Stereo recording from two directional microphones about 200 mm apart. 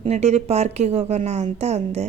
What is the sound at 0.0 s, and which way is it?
A woman's voice, 35° right (ahead or behind).